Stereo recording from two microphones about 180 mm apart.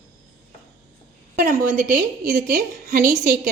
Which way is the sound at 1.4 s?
45° right (ahead or behind).